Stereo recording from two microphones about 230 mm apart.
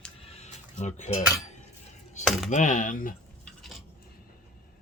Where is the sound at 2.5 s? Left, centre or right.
Left.